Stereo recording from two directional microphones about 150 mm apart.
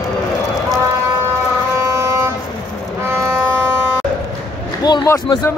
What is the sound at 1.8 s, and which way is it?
Vehicle, 20° right (ahead or behind).